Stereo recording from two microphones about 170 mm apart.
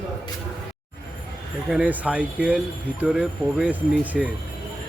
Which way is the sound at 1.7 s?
5° right (ahead or behind).